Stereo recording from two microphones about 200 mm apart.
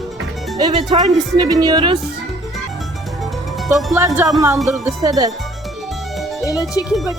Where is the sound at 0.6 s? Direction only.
20° right (ahead or behind).